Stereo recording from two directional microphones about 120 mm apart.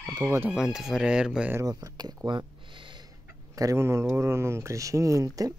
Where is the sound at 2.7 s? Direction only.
45° right (ahead or behind).